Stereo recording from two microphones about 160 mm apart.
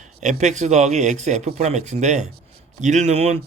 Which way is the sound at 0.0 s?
50° right (ahead or behind).